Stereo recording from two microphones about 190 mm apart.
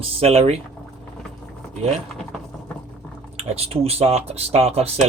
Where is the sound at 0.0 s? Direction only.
30° right (ahead or behind).